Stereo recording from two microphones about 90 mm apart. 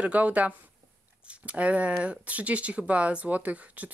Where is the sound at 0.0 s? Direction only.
15° right (ahead or behind).